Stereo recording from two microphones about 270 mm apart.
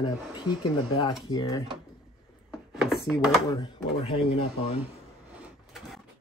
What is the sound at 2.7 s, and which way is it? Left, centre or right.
Chopping, centre.